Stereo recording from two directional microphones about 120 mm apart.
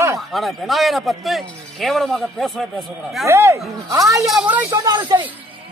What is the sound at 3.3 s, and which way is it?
A woman's voice, 20° right (ahead or behind).